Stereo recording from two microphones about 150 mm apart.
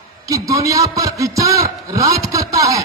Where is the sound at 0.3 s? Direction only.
20° right (ahead or behind).